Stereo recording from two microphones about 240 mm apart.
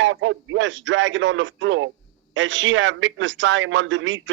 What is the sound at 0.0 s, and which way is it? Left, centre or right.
A man's voice, right.